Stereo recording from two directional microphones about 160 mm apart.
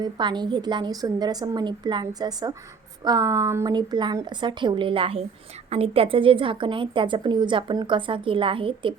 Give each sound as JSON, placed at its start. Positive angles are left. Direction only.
{"t": 0.0, "sound": "a woman's voice", "side_deg": -30}